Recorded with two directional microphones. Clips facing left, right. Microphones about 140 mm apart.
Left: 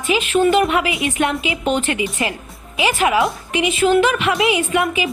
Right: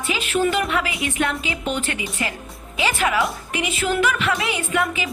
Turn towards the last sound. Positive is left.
turn(degrees=25)  # may be behind; listen again after turning